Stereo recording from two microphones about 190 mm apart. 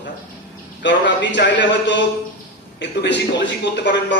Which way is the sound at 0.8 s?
70° left (ahead or behind).